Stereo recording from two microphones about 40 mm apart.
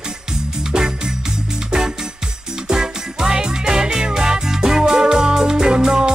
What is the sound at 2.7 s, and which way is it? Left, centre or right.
Music, centre.